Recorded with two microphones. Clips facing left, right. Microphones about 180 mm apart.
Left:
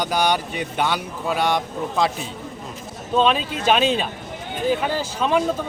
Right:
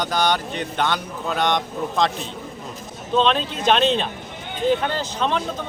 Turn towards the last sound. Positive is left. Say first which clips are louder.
# left 2 dB
turn(degrees=10)  # may be behind; listen again after turning